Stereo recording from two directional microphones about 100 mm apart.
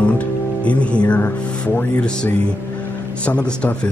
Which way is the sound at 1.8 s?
15° left (ahead or behind).